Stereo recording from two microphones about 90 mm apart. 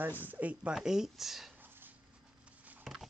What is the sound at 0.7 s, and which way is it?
Speech, 5° right (ahead or behind).